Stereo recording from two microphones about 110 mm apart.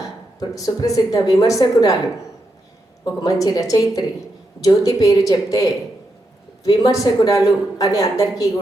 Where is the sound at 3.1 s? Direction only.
35° left (ahead or behind).